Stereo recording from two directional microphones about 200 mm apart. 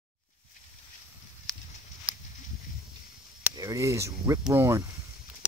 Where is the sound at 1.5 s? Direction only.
Centre (ahead or behind).